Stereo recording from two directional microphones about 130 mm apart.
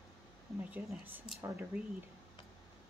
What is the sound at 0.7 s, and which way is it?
Speech, 15° right (ahead or behind).